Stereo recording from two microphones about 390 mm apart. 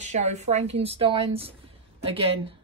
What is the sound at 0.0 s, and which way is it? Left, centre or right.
Speech, centre.